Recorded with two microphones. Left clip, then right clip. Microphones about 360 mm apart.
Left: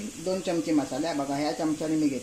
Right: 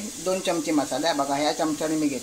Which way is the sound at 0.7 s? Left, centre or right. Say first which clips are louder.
Right 4 dB; right.